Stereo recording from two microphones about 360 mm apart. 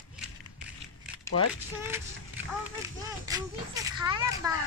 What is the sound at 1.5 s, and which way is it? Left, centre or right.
A child's voice, centre.